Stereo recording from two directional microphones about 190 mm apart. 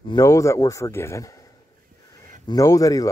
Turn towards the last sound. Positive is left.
turn(degrees=20)  # may be behind; listen again after turning